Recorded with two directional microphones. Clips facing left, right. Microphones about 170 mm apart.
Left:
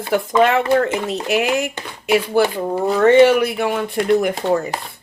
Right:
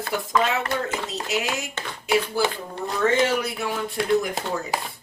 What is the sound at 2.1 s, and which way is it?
Speech, 80° left.